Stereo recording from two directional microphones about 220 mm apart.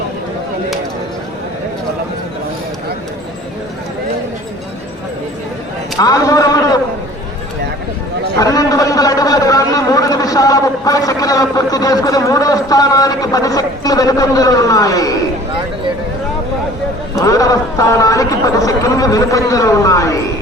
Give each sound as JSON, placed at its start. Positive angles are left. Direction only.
{"t": 6.0, "sound": "a sound", "side_deg": 15}
{"t": 8.4, "sound": "a man's voice", "side_deg": 15}
{"t": 17.2, "sound": "speech", "side_deg": 15}